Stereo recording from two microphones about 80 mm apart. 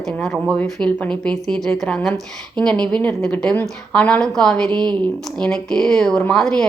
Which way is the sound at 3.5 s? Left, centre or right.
Centre.